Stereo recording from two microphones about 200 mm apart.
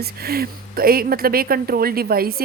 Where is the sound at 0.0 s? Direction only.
50° right (ahead or behind).